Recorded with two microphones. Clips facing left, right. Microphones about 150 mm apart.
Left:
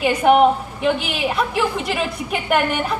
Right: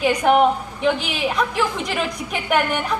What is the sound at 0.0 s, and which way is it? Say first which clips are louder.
A woman's voice: left 2 dB; 5° left (ahead or behind).